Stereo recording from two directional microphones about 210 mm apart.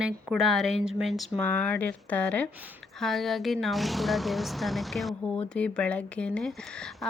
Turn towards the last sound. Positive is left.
turn(degrees=5)  # may be behind; listen again after turning